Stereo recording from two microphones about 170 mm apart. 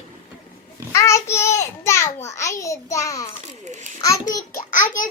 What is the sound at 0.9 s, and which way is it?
A child's voice, 15° left (ahead or behind).